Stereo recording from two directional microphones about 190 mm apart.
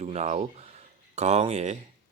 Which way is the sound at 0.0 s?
35° right (ahead or behind).